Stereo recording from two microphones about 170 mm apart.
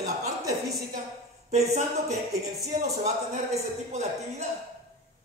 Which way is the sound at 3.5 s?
40° right (ahead or behind).